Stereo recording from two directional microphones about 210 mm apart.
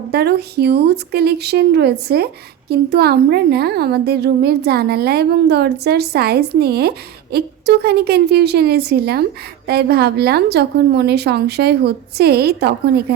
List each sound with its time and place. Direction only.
0.1 s speech: 50° right (ahead or behind)